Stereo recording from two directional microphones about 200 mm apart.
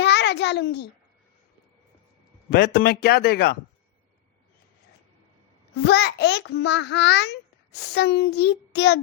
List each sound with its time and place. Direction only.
0.0 s a sound: 60° left (ahead or behind)
2.5 s a man's voice: 50° left (ahead or behind)
5.8 s a child's voice: 55° left (ahead or behind)